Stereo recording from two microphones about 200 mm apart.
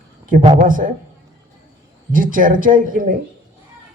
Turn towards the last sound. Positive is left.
turn(degrees=-40)  # may be behind; listen again after turning